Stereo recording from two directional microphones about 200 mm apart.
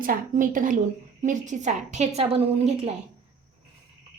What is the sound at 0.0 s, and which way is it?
A woman's voice, 45° right (ahead or behind).